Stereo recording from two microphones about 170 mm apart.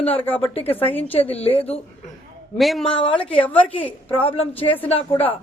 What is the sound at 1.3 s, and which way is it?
Speech, 35° left (ahead or behind).